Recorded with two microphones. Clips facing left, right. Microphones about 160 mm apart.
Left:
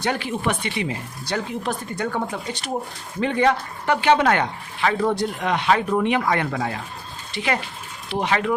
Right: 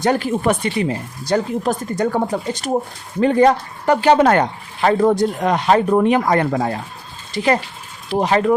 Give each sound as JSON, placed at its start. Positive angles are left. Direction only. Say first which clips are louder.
{"t": 0.0, "sound": "speech", "louder": "right 7 dB", "side_deg": -45}